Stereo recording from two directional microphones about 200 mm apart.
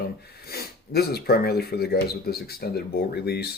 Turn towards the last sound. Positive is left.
turn(degrees=55)  # may be behind; listen again after turning